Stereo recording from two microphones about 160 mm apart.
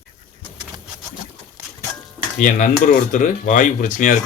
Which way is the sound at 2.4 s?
50° left (ahead or behind).